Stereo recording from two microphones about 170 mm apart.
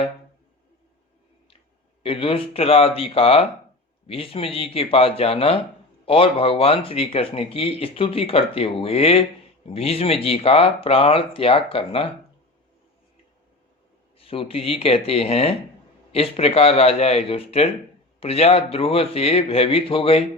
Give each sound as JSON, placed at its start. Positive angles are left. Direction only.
{"t": 2.0, "sound": "speech", "side_deg": 35}
{"t": 14.2, "sound": "speech", "side_deg": 35}